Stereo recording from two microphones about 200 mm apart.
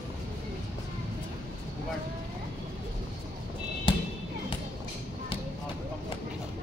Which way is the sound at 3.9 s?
25° left (ahead or behind).